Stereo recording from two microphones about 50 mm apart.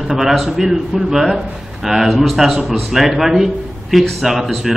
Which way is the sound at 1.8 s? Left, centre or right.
Centre.